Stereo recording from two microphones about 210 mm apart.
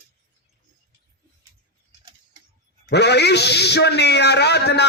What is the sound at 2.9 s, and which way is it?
A man's voice, 55° left (ahead or behind).